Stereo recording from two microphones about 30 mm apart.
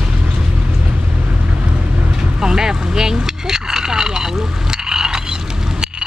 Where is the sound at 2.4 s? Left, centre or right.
Right.